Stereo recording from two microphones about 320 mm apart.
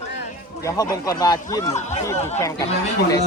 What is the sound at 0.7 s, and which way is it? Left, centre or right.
Speech, centre.